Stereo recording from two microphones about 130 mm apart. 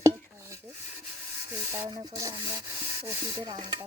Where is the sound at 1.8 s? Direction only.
30° right (ahead or behind).